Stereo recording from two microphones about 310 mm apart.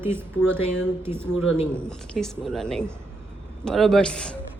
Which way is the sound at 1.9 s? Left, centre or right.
Centre.